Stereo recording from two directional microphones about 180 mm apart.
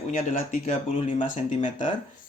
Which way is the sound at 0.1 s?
45° left (ahead or behind).